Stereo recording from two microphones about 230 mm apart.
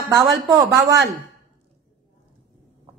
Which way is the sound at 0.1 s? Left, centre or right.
Centre.